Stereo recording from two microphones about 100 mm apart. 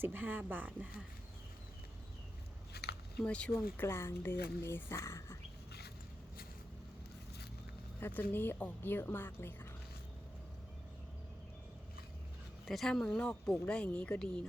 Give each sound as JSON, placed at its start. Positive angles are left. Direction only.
{"t": 0.0, "sound": "speech", "side_deg": -20}
{"t": 3.2, "sound": "speech", "side_deg": 10}
{"t": 3.8, "sound": "speech", "side_deg": 25}
{"t": 8.0, "sound": "speech", "side_deg": 20}
{"t": 12.6, "sound": "speech", "side_deg": 0}